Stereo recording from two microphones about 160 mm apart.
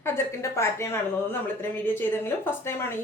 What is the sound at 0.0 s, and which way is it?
A woman's voice, 15° left (ahead or behind).